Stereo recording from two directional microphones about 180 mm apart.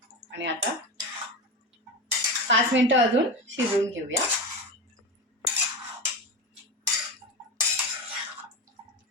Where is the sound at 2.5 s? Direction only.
90° right.